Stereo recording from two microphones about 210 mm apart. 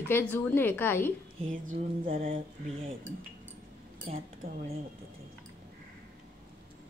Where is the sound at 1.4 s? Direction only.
35° right (ahead or behind).